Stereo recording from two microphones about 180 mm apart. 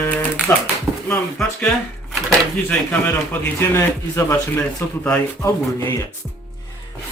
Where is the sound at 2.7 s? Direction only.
10° left (ahead or behind).